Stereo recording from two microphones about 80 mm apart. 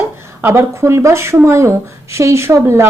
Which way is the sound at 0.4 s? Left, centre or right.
Right.